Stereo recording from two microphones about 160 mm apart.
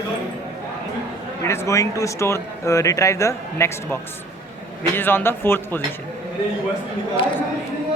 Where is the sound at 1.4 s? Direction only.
20° left (ahead or behind).